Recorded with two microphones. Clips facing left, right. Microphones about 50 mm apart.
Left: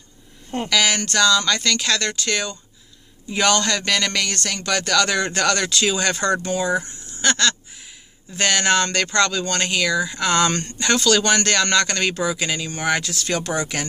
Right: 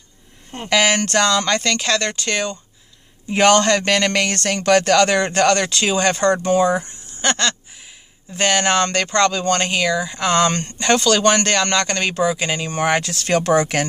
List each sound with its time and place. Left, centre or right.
0.7 s speech: right
1.0 s speech: right
1.6 s speech: right
3.3 s speech: right
9.7 s speech: centre
12.4 s speech: right